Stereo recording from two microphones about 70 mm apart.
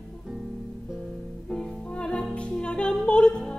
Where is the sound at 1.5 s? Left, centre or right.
Centre.